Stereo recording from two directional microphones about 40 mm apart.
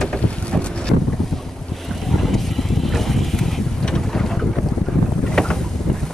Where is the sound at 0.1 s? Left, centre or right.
Left.